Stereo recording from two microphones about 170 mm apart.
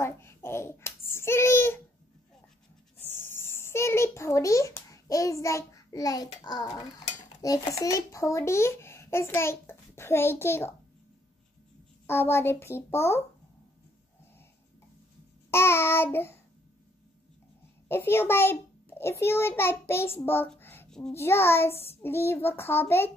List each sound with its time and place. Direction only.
0.0 s a sound: 15° left (ahead or behind)
3.0 s a sound: 15° left (ahead or behind)
6.4 s a child's voice: 20° left (ahead or behind)
12.1 s a child's voice: 15° left (ahead or behind)
15.5 s a child's voice: 15° left (ahead or behind)
17.8 s a child's voice: 15° left (ahead or behind)